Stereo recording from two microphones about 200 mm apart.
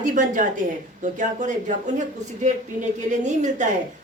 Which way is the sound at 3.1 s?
35° right (ahead or behind).